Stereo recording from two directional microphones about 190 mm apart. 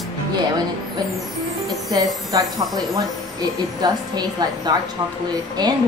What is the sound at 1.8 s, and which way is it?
Speech, 20° right (ahead or behind).